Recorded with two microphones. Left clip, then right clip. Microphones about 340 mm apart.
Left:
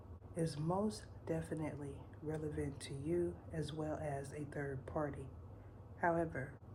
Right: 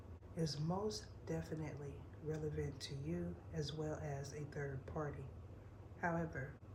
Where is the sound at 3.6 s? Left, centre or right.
Left.